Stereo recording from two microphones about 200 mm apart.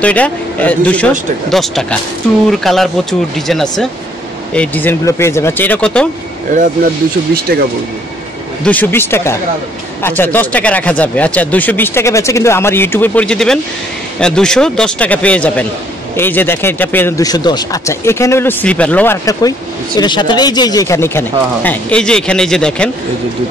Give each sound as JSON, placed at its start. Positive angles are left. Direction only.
{"t": 0.0, "sound": "speech", "side_deg": 5}
{"t": 7.3, "sound": "speech", "side_deg": -50}
{"t": 8.6, "sound": "speech", "side_deg": 10}